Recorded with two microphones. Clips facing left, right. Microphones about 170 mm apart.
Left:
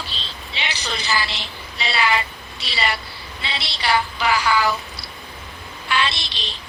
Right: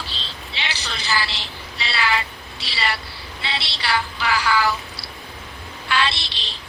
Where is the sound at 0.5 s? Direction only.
20° left (ahead or behind).